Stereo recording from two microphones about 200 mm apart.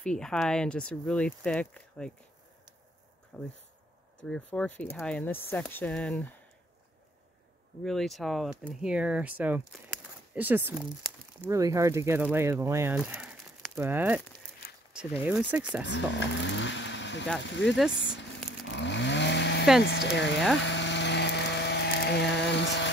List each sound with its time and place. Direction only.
0.0 s speech: 5° left (ahead or behind)
3.3 s speech: 5° left (ahead or behind)
7.8 s speech: centre (ahead or behind)
14.9 s a sound: 5° right (ahead or behind)
15.2 s speech: 5° right (ahead or behind)
15.8 s speech: 65° left (ahead or behind)
18.7 s chainsaw: 65° left (ahead or behind)
19.8 s speech: 60° left (ahead or behind)
20.5 s electric toothbrush: 65° left (ahead or behind)